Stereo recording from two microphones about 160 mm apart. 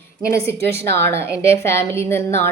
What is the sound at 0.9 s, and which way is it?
A woman's voice, 15° left (ahead or behind).